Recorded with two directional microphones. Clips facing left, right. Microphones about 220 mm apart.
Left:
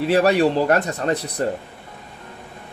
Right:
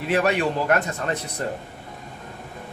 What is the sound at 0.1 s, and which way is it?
Speech, 35° left (ahead or behind).